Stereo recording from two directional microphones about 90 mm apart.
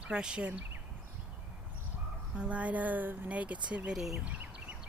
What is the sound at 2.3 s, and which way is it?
Speech, 15° right (ahead or behind).